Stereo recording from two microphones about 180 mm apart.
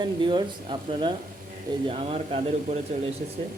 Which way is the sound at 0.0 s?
25° right (ahead or behind).